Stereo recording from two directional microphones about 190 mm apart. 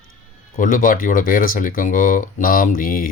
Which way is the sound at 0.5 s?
45° left (ahead or behind).